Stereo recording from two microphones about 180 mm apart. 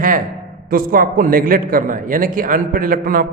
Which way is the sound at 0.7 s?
50° right (ahead or behind).